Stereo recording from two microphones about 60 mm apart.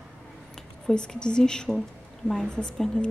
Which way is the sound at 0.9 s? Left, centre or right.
Centre.